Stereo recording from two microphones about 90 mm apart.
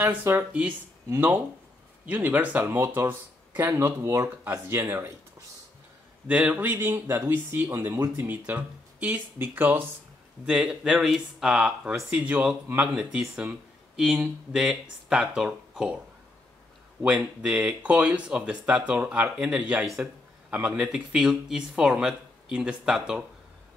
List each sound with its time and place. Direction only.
0.0 s speech: 25° right (ahead or behind)
2.0 s speech: 20° right (ahead or behind)
6.2 s speech: 15° right (ahead or behind)
8.3 s speech: 20° right (ahead or behind)
17.0 s speech: 10° right (ahead or behind)